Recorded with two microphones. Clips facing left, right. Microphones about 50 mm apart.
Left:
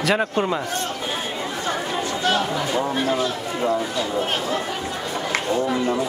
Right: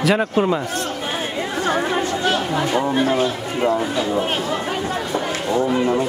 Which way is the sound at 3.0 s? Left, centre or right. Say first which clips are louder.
Right 3 dB; right.